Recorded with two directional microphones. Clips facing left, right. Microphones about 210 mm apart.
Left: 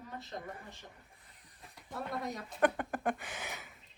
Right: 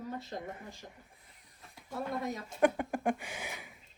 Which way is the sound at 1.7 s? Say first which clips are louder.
Right 3 dB; centre (ahead or behind).